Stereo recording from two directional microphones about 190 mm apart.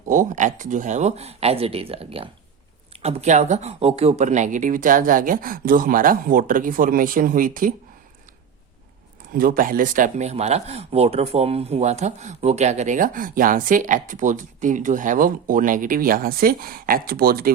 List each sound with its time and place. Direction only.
0.1 s speech: 40° right (ahead or behind)
9.3 s speech: 50° right (ahead or behind)